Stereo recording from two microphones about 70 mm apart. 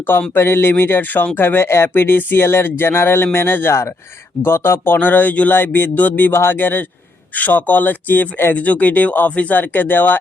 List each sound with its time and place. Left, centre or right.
0.0 s speech: left